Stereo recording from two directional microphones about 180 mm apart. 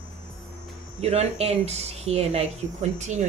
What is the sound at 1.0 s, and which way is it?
A woman's voice, 35° right (ahead or behind).